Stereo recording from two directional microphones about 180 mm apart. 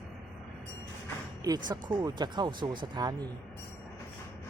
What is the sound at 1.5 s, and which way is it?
Speech, 20° right (ahead or behind).